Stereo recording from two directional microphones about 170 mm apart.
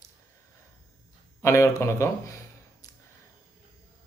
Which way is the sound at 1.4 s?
15° left (ahead or behind).